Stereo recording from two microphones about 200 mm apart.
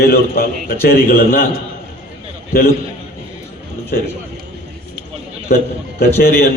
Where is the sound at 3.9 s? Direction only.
50° left (ahead or behind).